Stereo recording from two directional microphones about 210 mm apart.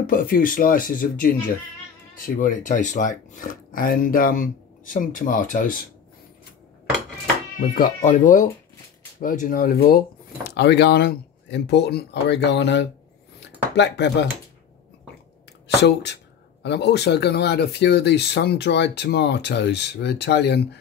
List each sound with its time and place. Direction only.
0.0 s speech: 45° left (ahead or behind)
7.7 s speech: 40° left (ahead or behind); by 12.8 s 55° left (ahead or behind)
13.4 s dishes: 55° left (ahead or behind)
15.8 s speech: 55° left (ahead or behind)